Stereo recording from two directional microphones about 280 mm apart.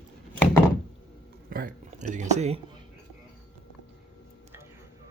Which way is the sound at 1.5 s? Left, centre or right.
Right.